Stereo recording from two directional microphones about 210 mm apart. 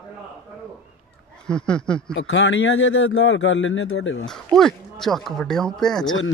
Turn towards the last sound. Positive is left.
turn(degrees=5)  # may be behind; listen again after turning